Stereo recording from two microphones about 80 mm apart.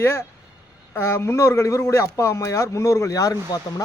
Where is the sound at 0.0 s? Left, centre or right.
Left.